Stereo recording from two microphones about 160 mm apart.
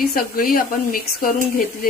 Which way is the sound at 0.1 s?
65° left (ahead or behind).